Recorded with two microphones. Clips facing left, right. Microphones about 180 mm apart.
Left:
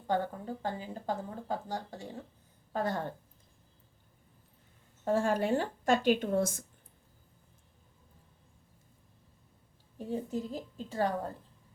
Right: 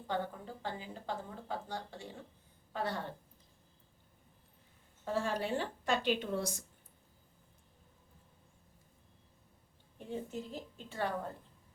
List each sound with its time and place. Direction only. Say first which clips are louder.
0.1 s speech: left 6 dB; 45° left (ahead or behind)
5.0 s speech: left 6 dB; 45° left (ahead or behind)
10.0 s a woman's voice: left 6 dB; 35° left (ahead or behind)